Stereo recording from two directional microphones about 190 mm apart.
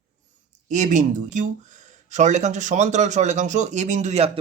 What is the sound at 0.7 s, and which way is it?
Speech, 40° right (ahead or behind).